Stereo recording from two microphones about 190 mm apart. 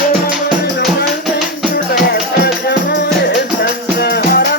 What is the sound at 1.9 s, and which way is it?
Music, 55° left (ahead or behind).